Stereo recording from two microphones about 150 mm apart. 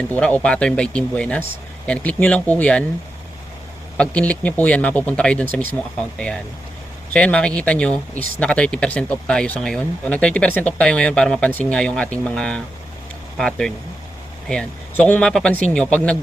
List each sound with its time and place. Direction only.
0.0 s speech: 5° left (ahead or behind)
3.9 s speech: 10° left (ahead or behind)